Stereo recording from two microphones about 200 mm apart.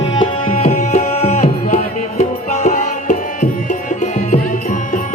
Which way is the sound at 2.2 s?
35° left (ahead or behind).